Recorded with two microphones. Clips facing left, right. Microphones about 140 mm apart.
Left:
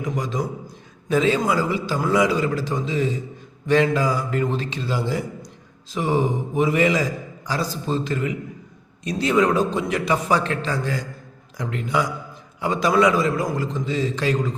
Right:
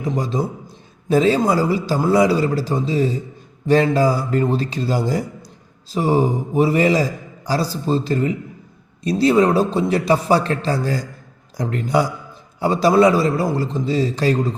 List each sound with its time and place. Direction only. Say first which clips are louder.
0.0 s a man's voice: right 4 dB; 30° right (ahead or behind)